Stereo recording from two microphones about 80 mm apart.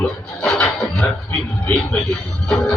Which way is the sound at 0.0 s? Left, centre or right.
Centre.